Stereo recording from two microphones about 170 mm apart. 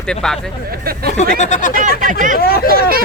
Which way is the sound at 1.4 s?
45° left (ahead or behind).